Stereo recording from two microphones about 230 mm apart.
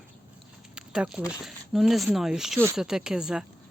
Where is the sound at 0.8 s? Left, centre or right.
Centre.